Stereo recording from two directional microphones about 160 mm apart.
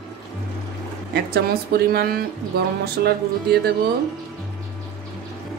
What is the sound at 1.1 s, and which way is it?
Speech, 80° right.